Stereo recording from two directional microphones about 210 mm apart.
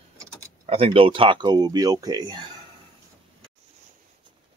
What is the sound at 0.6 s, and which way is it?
Speech, 25° right (ahead or behind).